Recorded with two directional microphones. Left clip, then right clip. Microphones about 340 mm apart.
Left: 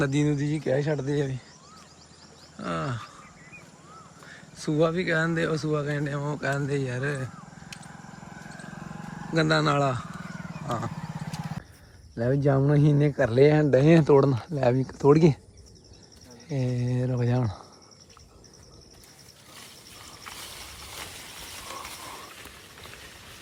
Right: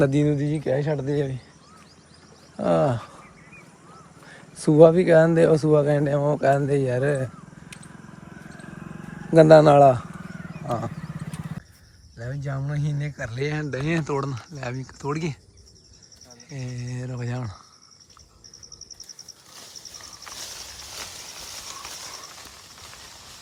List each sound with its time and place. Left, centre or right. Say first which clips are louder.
0.0 s speech: right 5 dB; centre
2.6 s speech: right 11 dB; centre
4.5 s speech: right 11 dB; centre
8.3 s wild animals: even; left
9.3 s speech: right 11 dB; centre
12.5 s speech: left 10 dB; centre
16.5 s speech: left 7 dB; centre